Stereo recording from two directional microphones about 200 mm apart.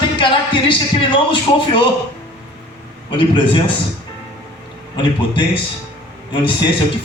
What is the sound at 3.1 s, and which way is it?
Speech, 25° left (ahead or behind).